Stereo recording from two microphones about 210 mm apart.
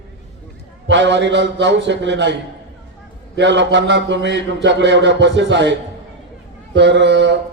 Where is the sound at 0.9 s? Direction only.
60° right (ahead or behind).